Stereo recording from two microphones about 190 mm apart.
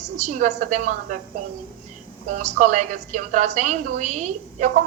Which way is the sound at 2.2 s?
40° right (ahead or behind).